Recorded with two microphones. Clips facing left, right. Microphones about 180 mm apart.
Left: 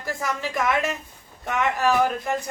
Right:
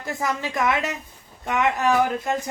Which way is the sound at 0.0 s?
20° right (ahead or behind).